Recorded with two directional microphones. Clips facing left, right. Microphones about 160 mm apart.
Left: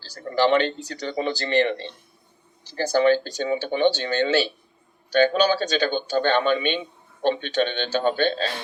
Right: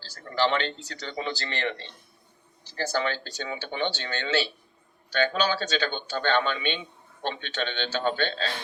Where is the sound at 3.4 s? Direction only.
35° left (ahead or behind).